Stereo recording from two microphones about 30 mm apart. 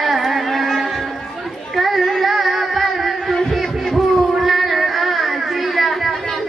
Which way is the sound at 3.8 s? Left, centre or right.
Centre.